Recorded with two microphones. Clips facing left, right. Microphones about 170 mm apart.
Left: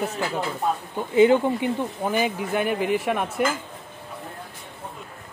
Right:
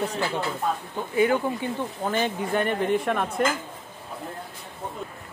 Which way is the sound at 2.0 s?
10° left (ahead or behind).